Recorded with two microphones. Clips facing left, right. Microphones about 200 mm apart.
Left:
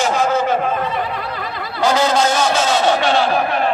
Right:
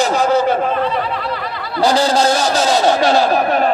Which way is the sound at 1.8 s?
35° right (ahead or behind).